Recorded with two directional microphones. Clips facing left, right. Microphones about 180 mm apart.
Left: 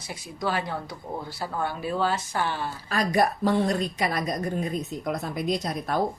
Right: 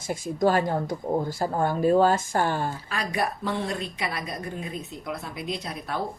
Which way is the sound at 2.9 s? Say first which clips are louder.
Left 8 dB; 40° left (ahead or behind).